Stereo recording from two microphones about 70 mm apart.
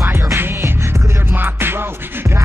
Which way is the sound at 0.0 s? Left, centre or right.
Right.